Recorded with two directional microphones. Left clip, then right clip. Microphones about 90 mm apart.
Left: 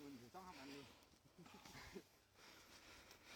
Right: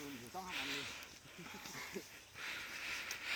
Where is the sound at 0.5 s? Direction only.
30° left (ahead or behind).